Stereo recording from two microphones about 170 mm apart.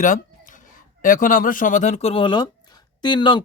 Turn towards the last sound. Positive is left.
turn(degrees=25)  # may be behind; listen again after turning